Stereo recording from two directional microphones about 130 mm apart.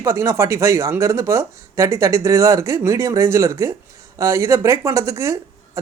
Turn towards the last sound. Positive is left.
turn(degrees=-25)  # may be behind; listen again after turning